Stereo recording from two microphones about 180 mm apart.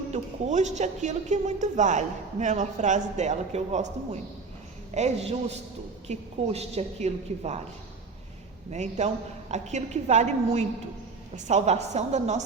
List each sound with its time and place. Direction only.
0.1 s a woman's voice: 40° right (ahead or behind)
8.7 s a woman's voice: 40° right (ahead or behind)